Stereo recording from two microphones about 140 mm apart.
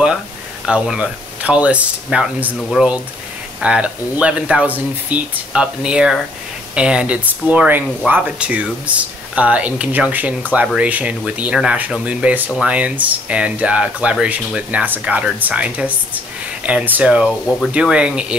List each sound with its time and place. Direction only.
0.7 s speech: 5° right (ahead or behind)